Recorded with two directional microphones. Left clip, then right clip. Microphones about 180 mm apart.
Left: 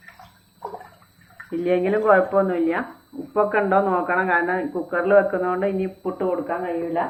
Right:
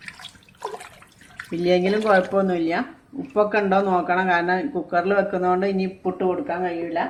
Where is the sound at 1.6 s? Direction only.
70° right (ahead or behind).